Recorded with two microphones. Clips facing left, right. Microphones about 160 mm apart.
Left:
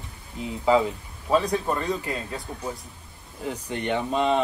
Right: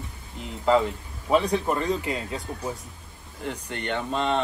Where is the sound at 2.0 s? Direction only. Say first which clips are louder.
Right 1 dB; 15° right (ahead or behind).